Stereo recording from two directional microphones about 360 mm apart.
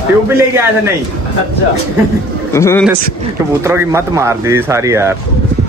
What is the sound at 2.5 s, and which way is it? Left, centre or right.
Speech, centre.